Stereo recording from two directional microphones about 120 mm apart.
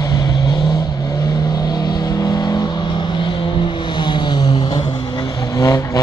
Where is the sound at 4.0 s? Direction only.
40° left (ahead or behind).